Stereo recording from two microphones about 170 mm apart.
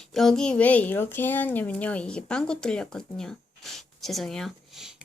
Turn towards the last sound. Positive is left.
turn(degrees=0)  # may be behind; listen again after turning